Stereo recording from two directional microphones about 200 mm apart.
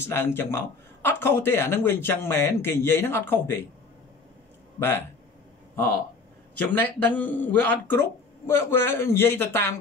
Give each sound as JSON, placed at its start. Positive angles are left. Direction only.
{"t": 0.0, "sound": "a man's voice", "side_deg": 10}
{"t": 4.7, "sound": "a man's voice", "side_deg": 10}
{"t": 6.6, "sound": "a man's voice", "side_deg": 10}